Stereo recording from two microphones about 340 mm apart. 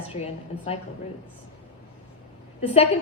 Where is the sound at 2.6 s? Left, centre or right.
Centre.